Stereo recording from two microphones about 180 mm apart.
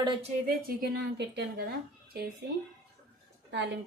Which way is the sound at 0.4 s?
60° right (ahead or behind).